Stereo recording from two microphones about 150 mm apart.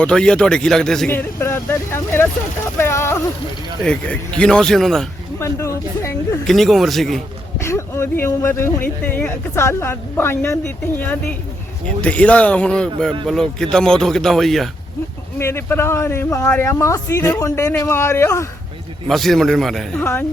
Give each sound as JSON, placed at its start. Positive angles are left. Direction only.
{"t": 0.0, "sound": "speech", "side_deg": 5}
{"t": 1.1, "sound": "speech", "side_deg": 15}
{"t": 3.8, "sound": "speech", "side_deg": 5}
{"t": 5.4, "sound": "a sound", "side_deg": 20}
{"t": 6.5, "sound": "speech", "side_deg": 0}
{"t": 7.6, "sound": "speech", "side_deg": 20}
{"t": 15.4, "sound": "speech", "side_deg": 15}
{"t": 19.0, "sound": "speech", "side_deg": 0}